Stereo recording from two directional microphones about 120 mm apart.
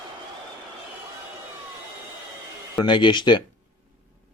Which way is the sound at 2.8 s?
40° left (ahead or behind).